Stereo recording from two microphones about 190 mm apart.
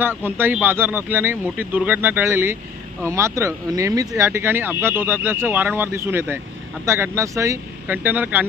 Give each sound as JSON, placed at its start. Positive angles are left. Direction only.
{"t": 0.0, "sound": "speech", "side_deg": -10}